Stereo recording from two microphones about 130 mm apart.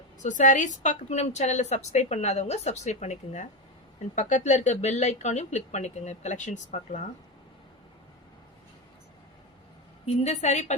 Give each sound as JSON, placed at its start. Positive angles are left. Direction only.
{"t": 0.2, "sound": "a woman's voice", "side_deg": 80}
{"t": 10.2, "sound": "a woman's voice", "side_deg": 60}